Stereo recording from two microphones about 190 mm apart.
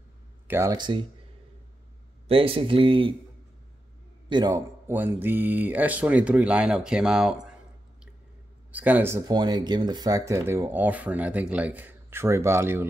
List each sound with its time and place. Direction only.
0.5 s speech: 15° right (ahead or behind)
2.2 s speech: 30° right (ahead or behind)
4.3 s speech: 20° right (ahead or behind); by 7.5 s 5° right (ahead or behind)
8.7 s speech: 10° right (ahead or behind)